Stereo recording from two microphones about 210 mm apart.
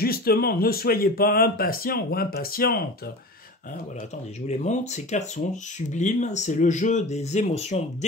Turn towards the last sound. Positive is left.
turn(degrees=30)  # may be behind; listen again after turning